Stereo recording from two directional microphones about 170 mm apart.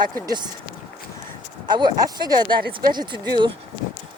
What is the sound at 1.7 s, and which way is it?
Speech, 25° right (ahead or behind).